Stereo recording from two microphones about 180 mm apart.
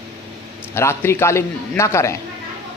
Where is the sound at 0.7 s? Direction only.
15° left (ahead or behind).